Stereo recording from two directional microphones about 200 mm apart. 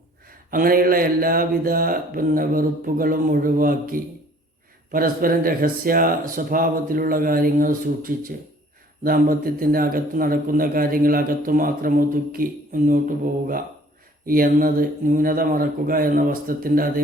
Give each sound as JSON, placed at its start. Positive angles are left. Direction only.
{"t": 0.5, "sound": "a man's voice", "side_deg": -45}